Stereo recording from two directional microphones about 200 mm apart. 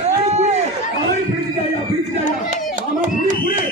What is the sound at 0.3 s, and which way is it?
Run, 35° right (ahead or behind).